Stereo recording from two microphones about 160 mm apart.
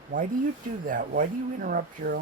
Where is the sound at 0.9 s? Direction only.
60° right (ahead or behind).